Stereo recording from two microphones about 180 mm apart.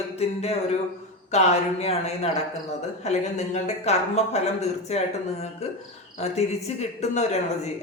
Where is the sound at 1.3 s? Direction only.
40° left (ahead or behind).